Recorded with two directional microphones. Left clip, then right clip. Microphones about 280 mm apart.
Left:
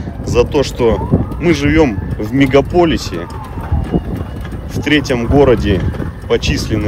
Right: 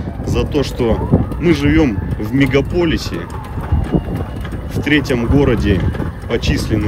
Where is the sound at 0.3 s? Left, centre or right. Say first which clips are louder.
Left 6 dB; centre.